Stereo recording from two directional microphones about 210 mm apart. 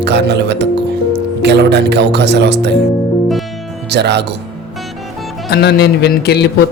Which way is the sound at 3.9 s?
55° right (ahead or behind).